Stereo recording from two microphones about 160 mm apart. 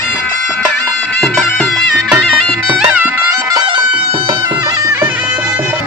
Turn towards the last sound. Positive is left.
turn(degrees=-15)  # may be behind; listen again after turning